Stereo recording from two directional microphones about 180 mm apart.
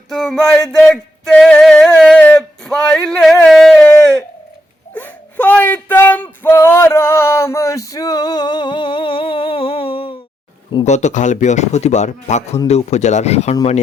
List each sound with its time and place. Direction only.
0.1 s male singing: centre (ahead or behind)
4.9 s speech: 10° left (ahead or behind)
6.4 s male singing: 10° left (ahead or behind); by 10.2 s 30° left (ahead or behind)
10.8 s speech: 40° left (ahead or behind)